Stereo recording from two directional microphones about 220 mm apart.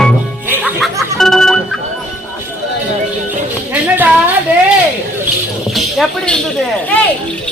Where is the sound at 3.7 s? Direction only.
5° right (ahead or behind).